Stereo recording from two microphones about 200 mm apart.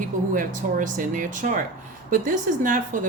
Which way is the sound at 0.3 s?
40° right (ahead or behind).